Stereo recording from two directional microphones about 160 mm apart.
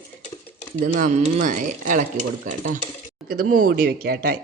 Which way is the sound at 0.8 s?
55° right (ahead or behind).